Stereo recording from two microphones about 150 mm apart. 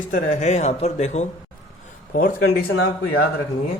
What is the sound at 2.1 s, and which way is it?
Speech, 70° left (ahead or behind).